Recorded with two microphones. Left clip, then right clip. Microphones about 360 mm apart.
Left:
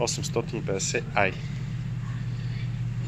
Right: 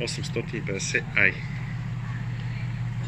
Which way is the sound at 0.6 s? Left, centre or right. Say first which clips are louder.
Right 1 dB; left.